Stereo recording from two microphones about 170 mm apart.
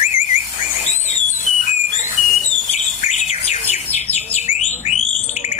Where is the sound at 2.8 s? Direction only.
40° left (ahead or behind).